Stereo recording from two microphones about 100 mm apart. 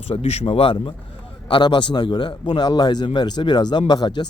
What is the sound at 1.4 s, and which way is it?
A man's voice, 50° left (ahead or behind).